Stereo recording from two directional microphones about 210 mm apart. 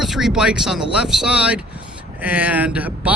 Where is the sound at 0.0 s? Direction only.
Centre (ahead or behind).